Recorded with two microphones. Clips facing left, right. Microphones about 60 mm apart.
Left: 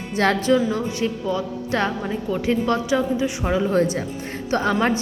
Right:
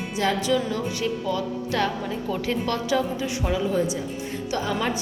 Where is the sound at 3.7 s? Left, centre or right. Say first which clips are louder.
Left 4 dB; left.